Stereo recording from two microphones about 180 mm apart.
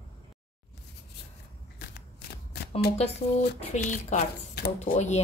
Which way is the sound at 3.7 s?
40° left (ahead or behind).